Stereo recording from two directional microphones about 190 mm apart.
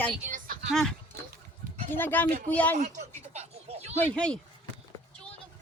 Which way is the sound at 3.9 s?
5° left (ahead or behind).